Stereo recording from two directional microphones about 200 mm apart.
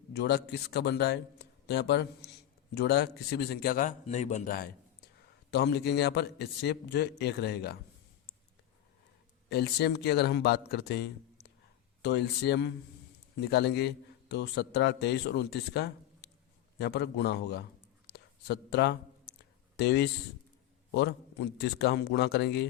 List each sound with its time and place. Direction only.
0.1 s a man's voice: 55° left (ahead or behind)
5.5 s a man's voice: 55° left (ahead or behind)
9.5 s a man's voice: 55° left (ahead or behind)